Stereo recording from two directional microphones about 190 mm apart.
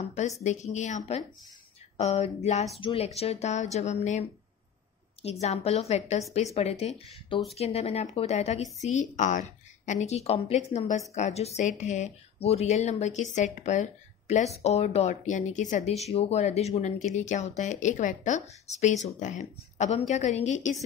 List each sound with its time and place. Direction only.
0.1 s speech: 35° left (ahead or behind)